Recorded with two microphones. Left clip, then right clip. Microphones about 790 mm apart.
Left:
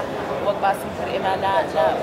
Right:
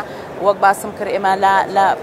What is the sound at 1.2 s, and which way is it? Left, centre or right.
Speech, right.